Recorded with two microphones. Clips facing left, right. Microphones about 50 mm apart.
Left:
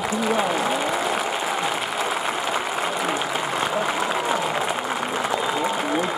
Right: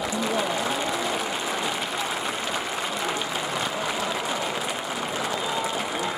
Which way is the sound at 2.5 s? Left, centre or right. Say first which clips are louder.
Left 4 dB; centre.